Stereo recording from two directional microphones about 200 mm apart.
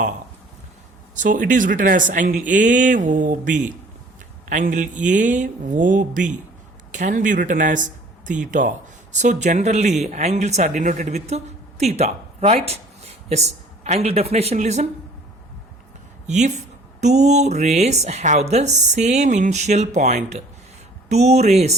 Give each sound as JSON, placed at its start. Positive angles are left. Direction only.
{"t": 1.1, "sound": "speech", "side_deg": -40}
{"t": 16.2, "sound": "speech", "side_deg": -35}